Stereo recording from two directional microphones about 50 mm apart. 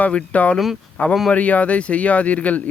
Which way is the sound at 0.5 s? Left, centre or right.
Centre.